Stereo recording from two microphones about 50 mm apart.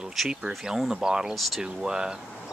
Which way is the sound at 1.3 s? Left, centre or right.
Centre.